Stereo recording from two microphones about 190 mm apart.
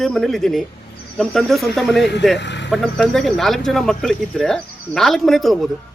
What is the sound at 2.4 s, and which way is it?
Speech, 65° left (ahead or behind).